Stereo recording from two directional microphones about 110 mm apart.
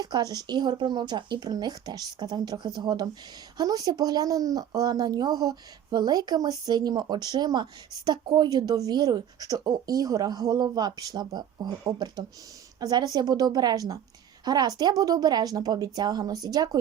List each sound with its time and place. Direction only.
0.0 s speech: 35° right (ahead or behind)